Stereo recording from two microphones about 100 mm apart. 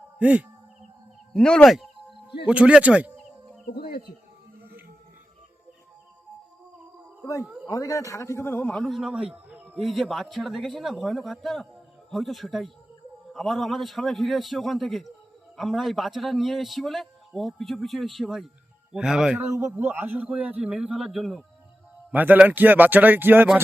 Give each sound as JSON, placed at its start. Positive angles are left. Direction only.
{"t": 0.2, "sound": "a man's voice", "side_deg": -15}
{"t": 1.3, "sound": "music", "side_deg": 5}
{"t": 2.5, "sound": "a man's voice", "side_deg": -10}
{"t": 7.4, "sound": "a sound", "side_deg": -10}
{"t": 7.7, "sound": "a man's voice", "side_deg": 35}
{"t": 8.6, "sound": "a man's voice", "side_deg": 5}
{"t": 9.7, "sound": "a man's voice", "side_deg": 0}
{"t": 19.4, "sound": "a man's voice", "side_deg": -25}
{"t": 22.1, "sound": "a man's voice", "side_deg": -15}